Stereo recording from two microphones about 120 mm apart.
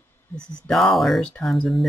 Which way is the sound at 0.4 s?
5° left (ahead or behind).